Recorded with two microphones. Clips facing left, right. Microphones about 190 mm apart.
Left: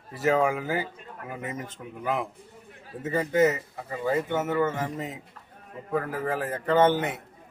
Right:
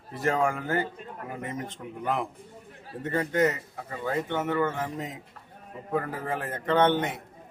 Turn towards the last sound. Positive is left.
turn(degrees=5)  # may be behind; listen again after turning